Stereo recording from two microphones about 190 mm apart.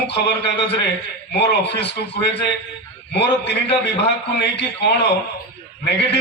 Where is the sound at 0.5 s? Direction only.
65° left (ahead or behind).